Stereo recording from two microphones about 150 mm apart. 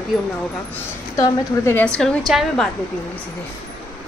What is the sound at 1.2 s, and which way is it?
Speech, 15° left (ahead or behind).